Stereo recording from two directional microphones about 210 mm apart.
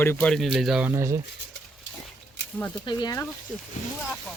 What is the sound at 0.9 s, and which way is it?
Speech, 15° right (ahead or behind).